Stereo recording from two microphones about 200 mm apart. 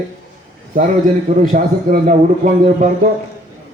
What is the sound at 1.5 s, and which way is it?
Speech, 45° right (ahead or behind).